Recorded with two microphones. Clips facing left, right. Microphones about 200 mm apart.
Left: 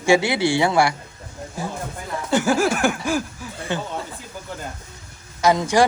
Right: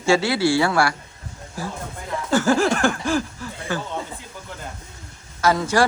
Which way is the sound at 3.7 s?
20° left (ahead or behind).